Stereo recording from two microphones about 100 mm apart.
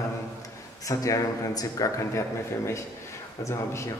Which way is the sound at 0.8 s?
35° left (ahead or behind).